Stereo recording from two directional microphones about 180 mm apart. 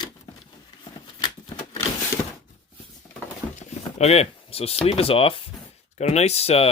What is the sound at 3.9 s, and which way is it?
Speech, 35° left (ahead or behind).